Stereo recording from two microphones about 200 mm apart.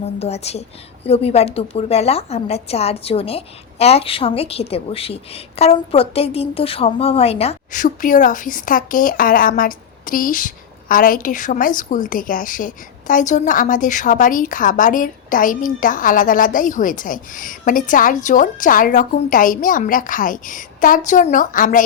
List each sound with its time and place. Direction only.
0.2 s a woman's voice: 30° left (ahead or behind)